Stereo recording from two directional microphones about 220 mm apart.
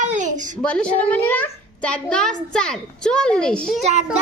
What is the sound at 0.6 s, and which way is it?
A child's voice, 5° left (ahead or behind).